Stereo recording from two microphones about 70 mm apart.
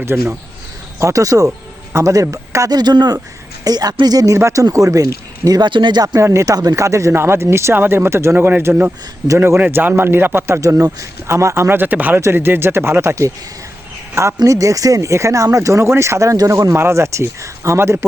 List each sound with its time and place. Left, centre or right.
0.0 s speech: right
0.9 s speech: right
2.6 s speech: right
3.6 s a woman's voice: right
4.3 s speech: right
5.5 s speech: right
6.1 s speech: right
7.1 s speech: right
10.6 s speech: right
14.4 s speech: right
16.7 s speech: right